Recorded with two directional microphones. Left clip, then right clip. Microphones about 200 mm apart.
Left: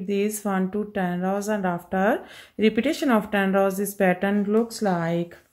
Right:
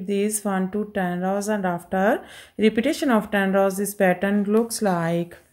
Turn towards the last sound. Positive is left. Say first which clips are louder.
# right 2 dB
turn(degrees=-10)  # may be behind; listen again after turning